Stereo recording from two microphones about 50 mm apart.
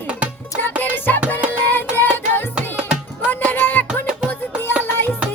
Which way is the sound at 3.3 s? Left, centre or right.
Left.